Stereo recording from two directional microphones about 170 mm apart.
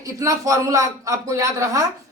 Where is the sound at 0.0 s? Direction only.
20° right (ahead or behind).